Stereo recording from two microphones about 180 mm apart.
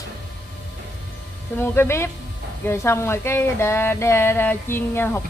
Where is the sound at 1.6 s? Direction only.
15° left (ahead or behind).